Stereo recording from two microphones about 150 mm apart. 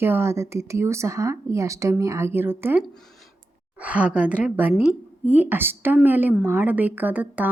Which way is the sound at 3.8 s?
10° right (ahead or behind).